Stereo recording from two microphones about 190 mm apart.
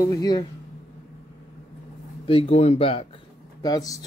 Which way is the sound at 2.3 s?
30° left (ahead or behind).